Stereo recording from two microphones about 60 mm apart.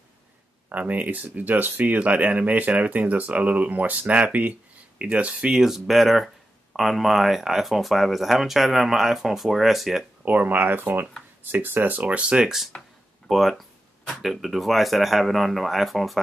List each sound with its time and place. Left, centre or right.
0.7 s speech: right
5.6 s speech: centre
10.2 s speech: right
12.0 s speech: centre
13.3 s speech: centre